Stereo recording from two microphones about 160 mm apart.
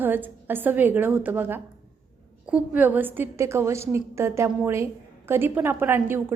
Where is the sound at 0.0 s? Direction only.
10° right (ahead or behind).